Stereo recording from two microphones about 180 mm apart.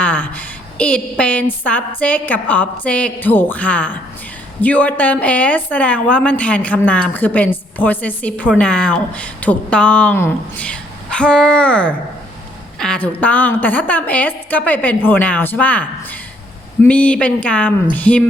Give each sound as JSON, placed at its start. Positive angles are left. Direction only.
{"t": 0.0, "sound": "a woman's voice", "side_deg": 10}